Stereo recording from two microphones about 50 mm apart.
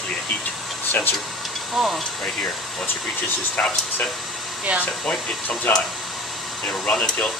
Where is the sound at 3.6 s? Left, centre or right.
Left.